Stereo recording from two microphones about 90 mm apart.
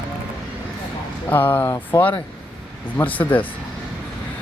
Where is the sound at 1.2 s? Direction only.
20° left (ahead or behind).